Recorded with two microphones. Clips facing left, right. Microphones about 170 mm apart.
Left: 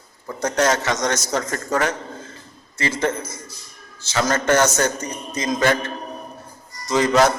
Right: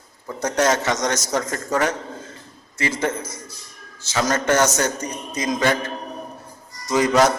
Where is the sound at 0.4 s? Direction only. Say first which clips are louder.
Even; 20° right (ahead or behind).